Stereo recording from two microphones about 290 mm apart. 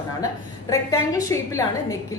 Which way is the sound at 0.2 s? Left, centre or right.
Centre.